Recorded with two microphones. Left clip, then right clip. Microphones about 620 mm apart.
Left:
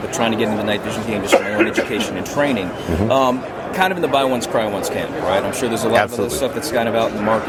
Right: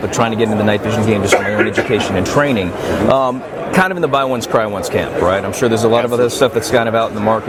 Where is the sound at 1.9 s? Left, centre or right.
Right.